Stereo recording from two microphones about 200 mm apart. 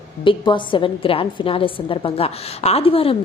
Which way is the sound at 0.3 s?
25° left (ahead or behind).